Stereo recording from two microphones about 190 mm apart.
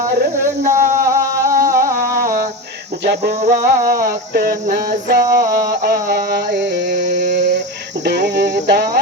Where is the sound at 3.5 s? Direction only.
55° right (ahead or behind).